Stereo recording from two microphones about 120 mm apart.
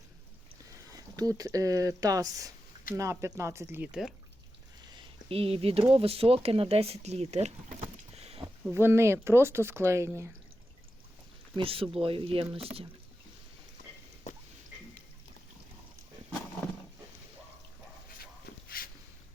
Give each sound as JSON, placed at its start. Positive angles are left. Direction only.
{"t": 0.9, "sound": "speech", "side_deg": -30}
{"t": 5.3, "sound": "speech", "side_deg": -55}
{"t": 8.7, "sound": "speech", "side_deg": -20}
{"t": 11.5, "sound": "speech", "side_deg": -50}